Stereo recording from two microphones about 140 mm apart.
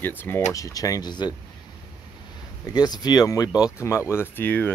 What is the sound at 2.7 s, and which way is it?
Speech, 30° left (ahead or behind).